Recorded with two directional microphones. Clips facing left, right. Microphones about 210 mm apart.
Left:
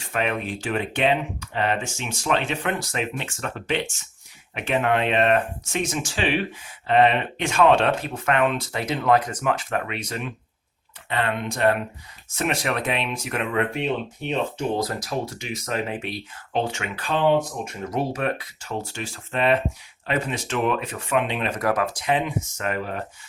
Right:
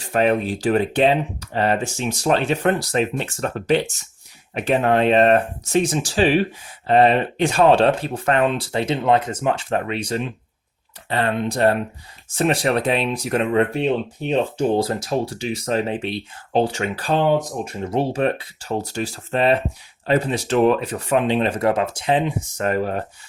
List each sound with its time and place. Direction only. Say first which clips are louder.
0.0 s speech: right 7 dB; 35° right (ahead or behind)